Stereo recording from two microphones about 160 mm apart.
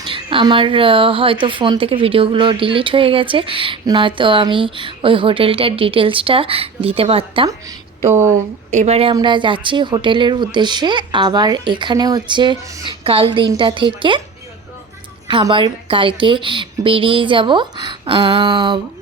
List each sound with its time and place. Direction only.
0.0 s a woman's voice: 30° right (ahead or behind)
7.4 s a woman's voice: 20° right (ahead or behind)
8.7 s a woman's voice: 45° right (ahead or behind)
15.3 s a woman's voice: 30° right (ahead or behind)